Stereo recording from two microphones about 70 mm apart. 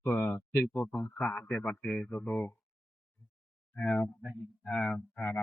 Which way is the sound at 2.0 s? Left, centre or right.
Left.